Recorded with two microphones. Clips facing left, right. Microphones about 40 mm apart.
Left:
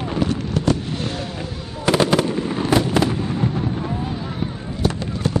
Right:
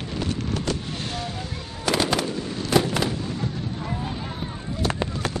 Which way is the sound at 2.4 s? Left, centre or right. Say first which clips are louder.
Left 7 dB; left.